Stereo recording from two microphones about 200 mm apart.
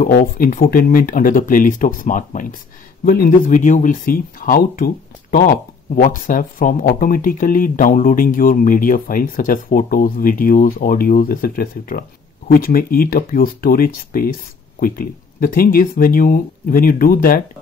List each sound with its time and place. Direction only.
0.0 s speech: 45° left (ahead or behind)